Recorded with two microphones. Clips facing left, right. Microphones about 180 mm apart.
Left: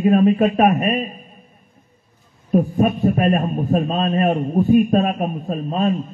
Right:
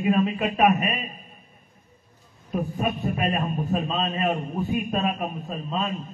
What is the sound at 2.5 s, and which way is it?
A man's voice, 45° left (ahead or behind).